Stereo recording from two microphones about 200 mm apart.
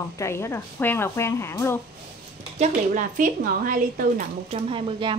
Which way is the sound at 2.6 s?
40° right (ahead or behind).